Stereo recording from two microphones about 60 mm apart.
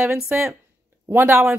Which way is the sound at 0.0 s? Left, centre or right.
Right.